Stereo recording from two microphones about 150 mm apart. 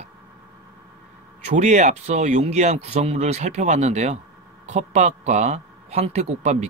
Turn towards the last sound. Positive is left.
turn(degrees=-50)  # may be behind; listen again after turning